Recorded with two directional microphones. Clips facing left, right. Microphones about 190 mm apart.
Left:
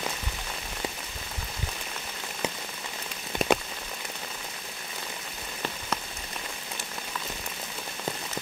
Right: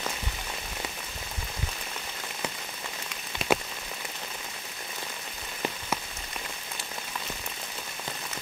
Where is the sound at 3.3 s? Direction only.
50° left (ahead or behind).